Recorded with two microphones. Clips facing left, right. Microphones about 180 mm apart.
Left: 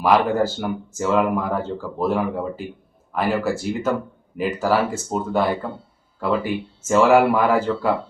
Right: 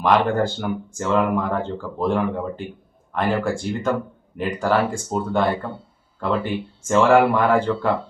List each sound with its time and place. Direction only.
0.0 s speech: 5° left (ahead or behind)